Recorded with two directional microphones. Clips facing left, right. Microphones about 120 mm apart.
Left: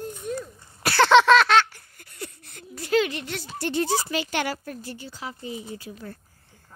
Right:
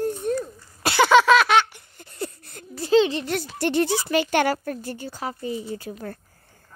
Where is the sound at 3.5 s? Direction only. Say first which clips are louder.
Right 2 dB; 65° right (ahead or behind); by 6.1 s 50° right (ahead or behind).